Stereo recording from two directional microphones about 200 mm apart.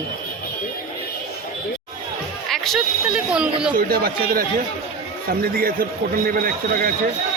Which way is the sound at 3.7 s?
45° right (ahead or behind).